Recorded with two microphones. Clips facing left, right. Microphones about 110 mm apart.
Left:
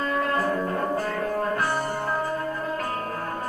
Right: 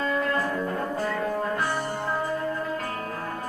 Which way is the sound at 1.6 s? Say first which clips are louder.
Left 2 dB; 45° left (ahead or behind).